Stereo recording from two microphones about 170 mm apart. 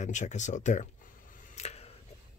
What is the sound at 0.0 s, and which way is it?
Speech, 45° left (ahead or behind).